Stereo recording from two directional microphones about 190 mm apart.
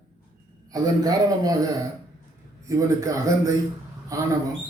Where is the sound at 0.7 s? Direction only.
20° right (ahead or behind).